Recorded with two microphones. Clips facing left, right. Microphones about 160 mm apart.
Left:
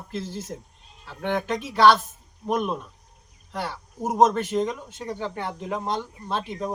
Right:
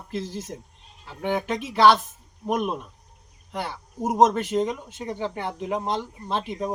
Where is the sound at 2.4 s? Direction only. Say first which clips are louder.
Even; 15° right (ahead or behind).